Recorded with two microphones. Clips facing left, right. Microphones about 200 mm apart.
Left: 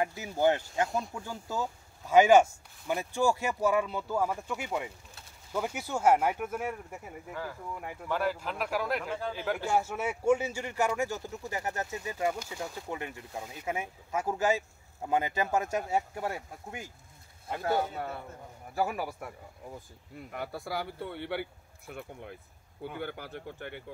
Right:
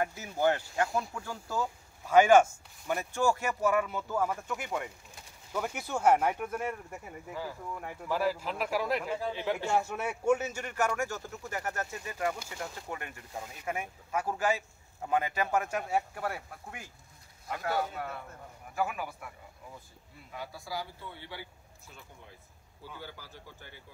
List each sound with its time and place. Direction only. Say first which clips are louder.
0.0 s speech: left 2 dB; 15° left (ahead or behind)
7.2 s speech: even; 5° right (ahead or behind); by 12.4 s 20° left (ahead or behind)
13.7 s speech: left 1 dB; 20° left (ahead or behind)
18.8 s speech: left 2 dB; 40° left (ahead or behind)
20.2 s speech: left 4 dB; 60° left (ahead or behind)